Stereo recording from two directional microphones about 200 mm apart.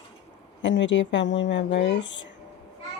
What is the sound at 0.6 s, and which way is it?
Speech, 65° left (ahead or behind).